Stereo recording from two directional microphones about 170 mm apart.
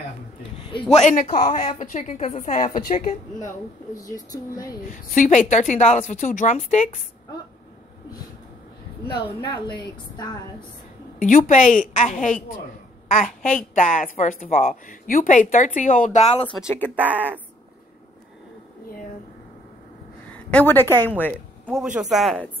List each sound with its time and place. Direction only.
0.9 s speech: 40° left (ahead or behind)
4.8 s speech: 50° left (ahead or behind)
9.0 s a woman's voice: 30° left (ahead or behind)
11.1 s speech: 50° left (ahead or behind)
13.7 s speech: 50° left (ahead or behind)
16.9 s speech: 10° right (ahead or behind)
20.3 s a woman's voice: 10° left (ahead or behind)